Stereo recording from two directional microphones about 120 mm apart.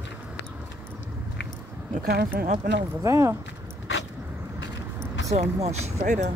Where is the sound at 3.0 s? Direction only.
25° right (ahead or behind).